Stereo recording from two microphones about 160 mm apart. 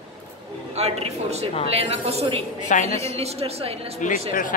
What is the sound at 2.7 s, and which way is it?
Speech, 50° left (ahead or behind).